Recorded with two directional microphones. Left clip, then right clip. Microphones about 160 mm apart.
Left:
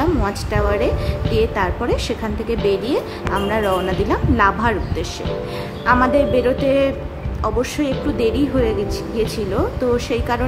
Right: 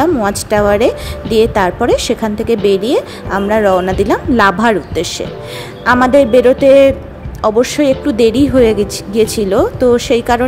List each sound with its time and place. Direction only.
0.0 s a woman's voice: 50° right (ahead or behind)